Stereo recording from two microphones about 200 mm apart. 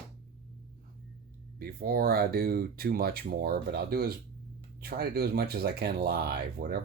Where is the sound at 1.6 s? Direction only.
50° right (ahead or behind).